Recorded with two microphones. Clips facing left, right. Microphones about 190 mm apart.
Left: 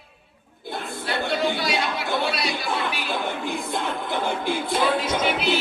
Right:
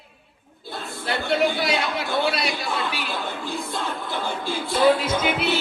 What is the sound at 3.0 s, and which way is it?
Music, 20° left (ahead or behind).